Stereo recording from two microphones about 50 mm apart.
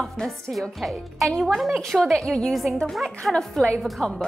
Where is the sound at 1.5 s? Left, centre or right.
Centre.